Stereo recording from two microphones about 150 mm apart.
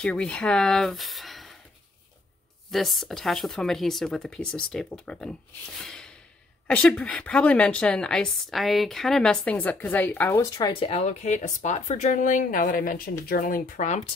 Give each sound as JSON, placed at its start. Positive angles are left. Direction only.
{"t": 0.0, "sound": "speech", "side_deg": 5}
{"t": 2.7, "sound": "a woman's voice", "side_deg": 0}